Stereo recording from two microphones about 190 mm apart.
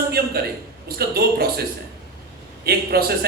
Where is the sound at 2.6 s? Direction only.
55° right (ahead or behind).